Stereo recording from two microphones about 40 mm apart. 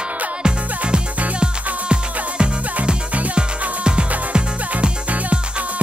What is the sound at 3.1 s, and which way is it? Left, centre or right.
Music, right.